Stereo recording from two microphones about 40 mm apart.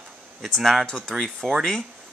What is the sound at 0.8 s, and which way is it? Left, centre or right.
Speech, left.